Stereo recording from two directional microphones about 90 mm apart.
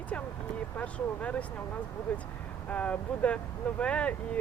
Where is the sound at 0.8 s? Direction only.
15° left (ahead or behind).